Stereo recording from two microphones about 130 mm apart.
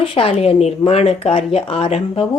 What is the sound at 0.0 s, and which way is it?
A woman's voice, 45° left (ahead or behind).